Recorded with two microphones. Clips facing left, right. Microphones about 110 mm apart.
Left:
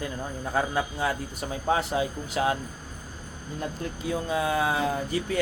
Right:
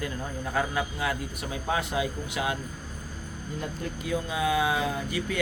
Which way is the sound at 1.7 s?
35° left (ahead or behind).